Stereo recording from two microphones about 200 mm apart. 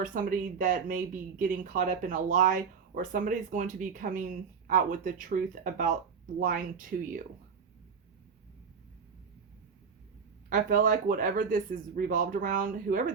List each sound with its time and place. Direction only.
0.0 s speech: 40° right (ahead or behind)
10.5 s speech: 40° right (ahead or behind)